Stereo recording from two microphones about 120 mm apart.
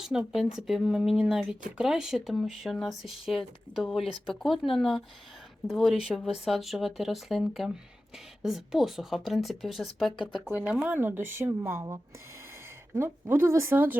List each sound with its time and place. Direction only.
0.0 s speech: 5° right (ahead or behind)
10.5 s a woman's voice: 15° right (ahead or behind)